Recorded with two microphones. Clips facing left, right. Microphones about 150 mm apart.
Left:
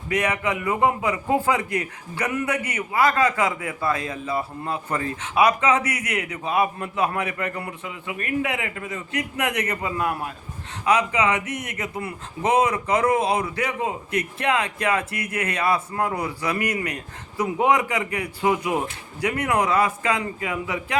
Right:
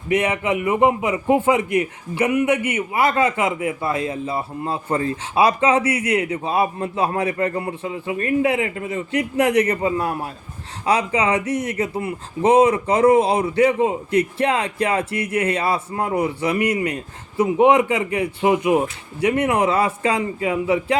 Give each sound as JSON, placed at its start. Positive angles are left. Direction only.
{"t": 0.1, "sound": "a man's voice", "side_deg": -25}